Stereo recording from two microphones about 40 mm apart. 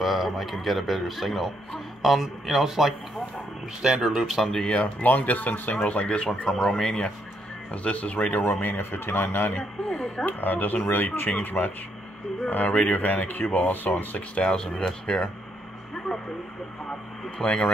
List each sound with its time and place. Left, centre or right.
0.0 s speech: centre
4.0 s speech: centre
4.6 s speech: left
5.0 s speech: left; by 7.1 s centre
7.7 s speech: left
8.4 s speech: left
10.2 s speech: left
11.6 s speech: left
12.4 s speech: left
14.1 s speech: left
14.5 s speech: centre
17.4 s speech: left